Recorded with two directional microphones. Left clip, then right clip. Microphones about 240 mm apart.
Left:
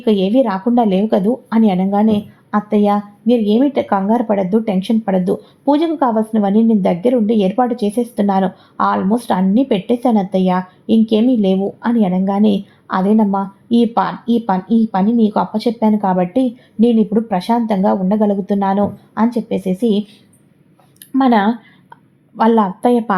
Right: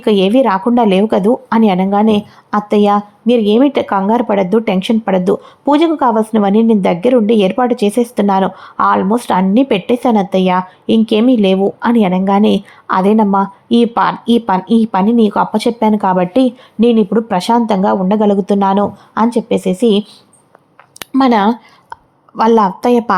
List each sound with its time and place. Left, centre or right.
0.0 s a woman's voice: centre
21.0 s a sound: right
22.4 s speech: right